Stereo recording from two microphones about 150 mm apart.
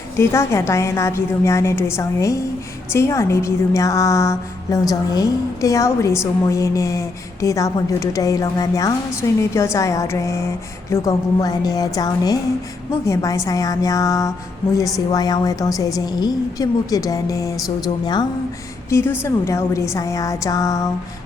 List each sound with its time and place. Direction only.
0.2 s a woman's voice: 20° left (ahead or behind)
18.9 s a woman's voice: 15° left (ahead or behind)